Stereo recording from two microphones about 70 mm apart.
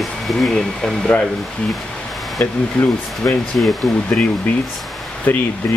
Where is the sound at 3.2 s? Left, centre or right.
Left.